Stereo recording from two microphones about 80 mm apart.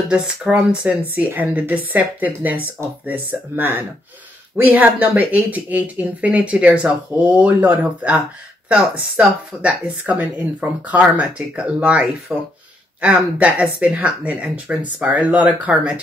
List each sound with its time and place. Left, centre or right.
0.1 s speech: centre